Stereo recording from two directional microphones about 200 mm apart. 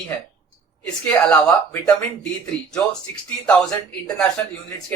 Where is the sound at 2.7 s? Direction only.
5° left (ahead or behind).